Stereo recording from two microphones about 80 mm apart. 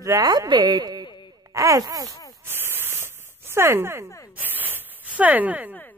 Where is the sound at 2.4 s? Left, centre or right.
Right.